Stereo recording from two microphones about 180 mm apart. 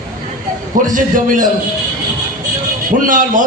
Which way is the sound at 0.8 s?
45° right (ahead or behind).